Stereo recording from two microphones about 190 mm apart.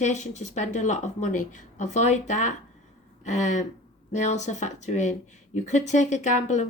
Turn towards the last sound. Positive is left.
turn(degrees=40)  # may be behind; listen again after turning